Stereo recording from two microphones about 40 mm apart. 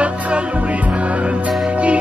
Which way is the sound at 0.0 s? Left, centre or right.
Right.